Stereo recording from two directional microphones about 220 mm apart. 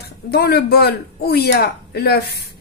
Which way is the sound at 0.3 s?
45° left (ahead or behind).